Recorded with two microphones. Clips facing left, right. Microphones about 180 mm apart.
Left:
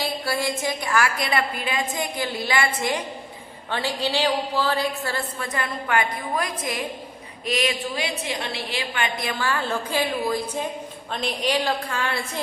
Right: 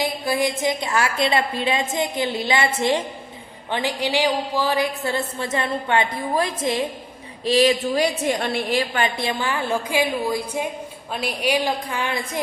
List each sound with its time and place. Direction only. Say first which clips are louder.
0.0 s a sound: right 4 dB; 15° right (ahead or behind)
0.6 s a woman's voice: right 2 dB; 20° right (ahead or behind); by 9.0 s 40° right (ahead or behind)
9.1 s a woman's voice: right 2 dB; 20° right (ahead or behind)